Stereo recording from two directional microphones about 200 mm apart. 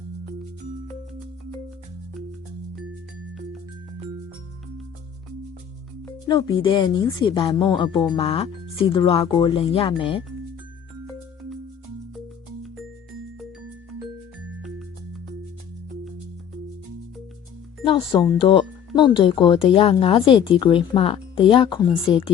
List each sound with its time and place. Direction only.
6.1 s music: 20° left (ahead or behind)
6.6 s a woman's voice: 20° left (ahead or behind)
17.8 s a woman's voice: 25° left (ahead or behind)